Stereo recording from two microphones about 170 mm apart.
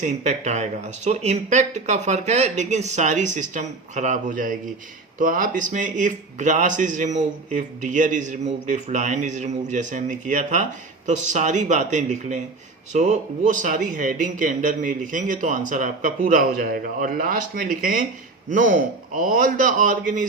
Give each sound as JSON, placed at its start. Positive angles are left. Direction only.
{"t": 0.0, "sound": "a man's voice", "side_deg": -45}